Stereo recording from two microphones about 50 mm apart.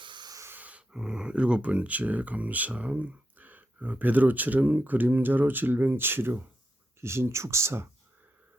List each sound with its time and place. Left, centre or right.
0.5 s a sound: right
0.9 s speech: centre; by 6.4 s right
7.0 s speech: right